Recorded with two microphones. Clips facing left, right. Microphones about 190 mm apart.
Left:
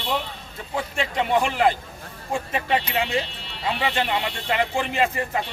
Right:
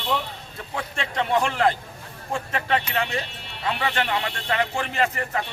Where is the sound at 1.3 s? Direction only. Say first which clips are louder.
Left 1 dB; 15° left (ahead or behind).